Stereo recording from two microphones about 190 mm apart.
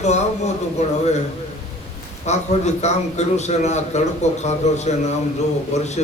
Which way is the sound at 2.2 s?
35° left (ahead or behind).